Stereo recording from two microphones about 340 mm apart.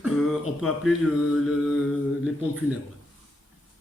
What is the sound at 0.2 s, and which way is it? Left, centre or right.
Speech, centre.